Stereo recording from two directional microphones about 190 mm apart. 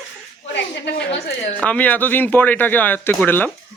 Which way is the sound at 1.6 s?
5° left (ahead or behind).